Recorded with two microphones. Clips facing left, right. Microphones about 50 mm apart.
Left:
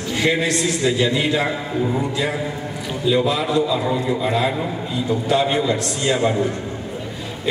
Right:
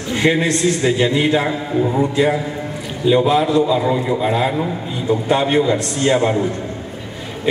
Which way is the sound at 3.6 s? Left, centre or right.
Right.